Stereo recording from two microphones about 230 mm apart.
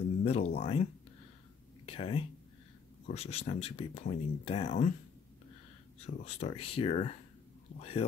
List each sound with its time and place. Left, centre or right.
0.2 s speech: left
1.9 s speech: left
6.0 s speech: left